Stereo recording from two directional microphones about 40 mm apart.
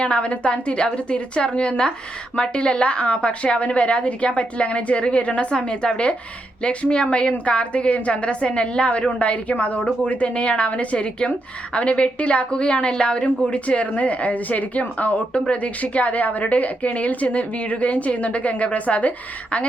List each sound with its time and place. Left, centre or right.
0.0 s a woman's voice: left